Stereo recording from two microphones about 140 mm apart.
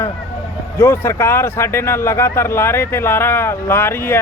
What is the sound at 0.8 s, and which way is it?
Speech, 20° left (ahead or behind).